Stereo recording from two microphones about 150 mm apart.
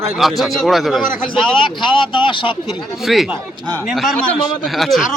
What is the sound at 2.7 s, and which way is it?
Speech, centre (ahead or behind).